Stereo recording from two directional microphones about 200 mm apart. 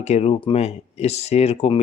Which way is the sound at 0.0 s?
35° left (ahead or behind).